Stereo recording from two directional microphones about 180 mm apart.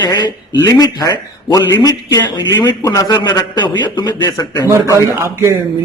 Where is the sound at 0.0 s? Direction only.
25° left (ahead or behind).